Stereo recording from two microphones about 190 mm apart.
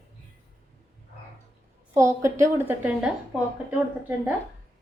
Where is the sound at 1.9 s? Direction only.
15° right (ahead or behind).